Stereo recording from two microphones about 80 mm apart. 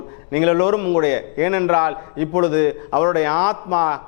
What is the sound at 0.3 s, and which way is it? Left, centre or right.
A man's voice, centre.